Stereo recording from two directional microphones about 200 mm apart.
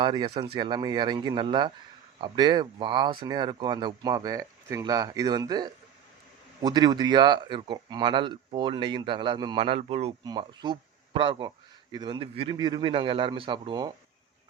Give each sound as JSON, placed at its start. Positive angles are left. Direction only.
{"t": 0.0, "sound": "speech", "side_deg": -25}